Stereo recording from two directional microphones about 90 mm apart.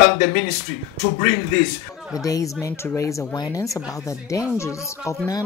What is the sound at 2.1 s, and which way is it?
Speech, 40° left (ahead or behind).